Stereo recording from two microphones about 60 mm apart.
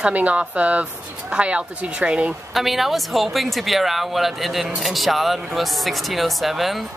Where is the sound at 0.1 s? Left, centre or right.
Right.